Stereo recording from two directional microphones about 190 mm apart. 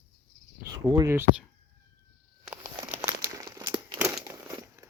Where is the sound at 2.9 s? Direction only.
15° right (ahead or behind).